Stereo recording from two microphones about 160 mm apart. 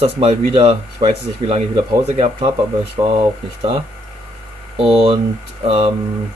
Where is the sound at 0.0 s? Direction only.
35° right (ahead or behind).